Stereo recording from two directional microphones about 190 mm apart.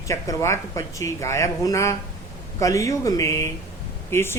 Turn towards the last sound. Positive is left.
turn(degrees=10)  # may be behind; listen again after turning